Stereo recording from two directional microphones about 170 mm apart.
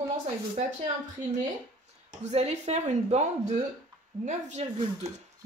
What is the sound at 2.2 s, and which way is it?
Speech, 40° right (ahead or behind).